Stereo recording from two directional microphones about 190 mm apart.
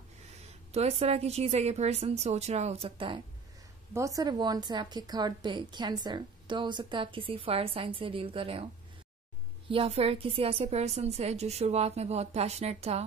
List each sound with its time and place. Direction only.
0.7 s a woman's voice: 35° right (ahead or behind)
3.9 s a woman's voice: 15° right (ahead or behind)
9.7 s a woman's voice: 30° right (ahead or behind)